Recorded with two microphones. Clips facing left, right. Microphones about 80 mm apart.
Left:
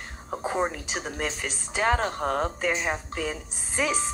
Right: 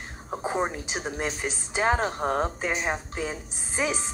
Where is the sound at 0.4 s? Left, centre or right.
Centre.